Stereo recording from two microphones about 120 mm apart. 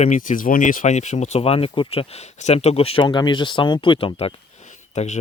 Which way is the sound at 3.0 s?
40° left (ahead or behind).